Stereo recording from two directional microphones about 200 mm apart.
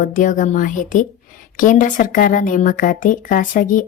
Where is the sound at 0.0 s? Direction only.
40° left (ahead or behind).